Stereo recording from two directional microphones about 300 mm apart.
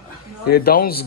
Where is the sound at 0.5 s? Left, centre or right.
Left.